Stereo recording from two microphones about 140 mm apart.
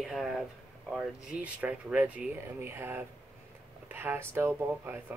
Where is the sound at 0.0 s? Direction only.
Centre (ahead or behind).